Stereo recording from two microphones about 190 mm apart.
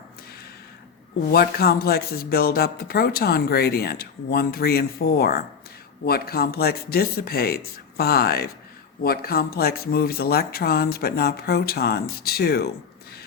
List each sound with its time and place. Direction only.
1.3 s speech: 55° left (ahead or behind)